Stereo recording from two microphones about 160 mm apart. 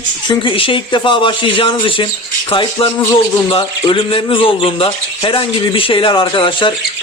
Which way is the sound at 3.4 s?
30° left (ahead or behind).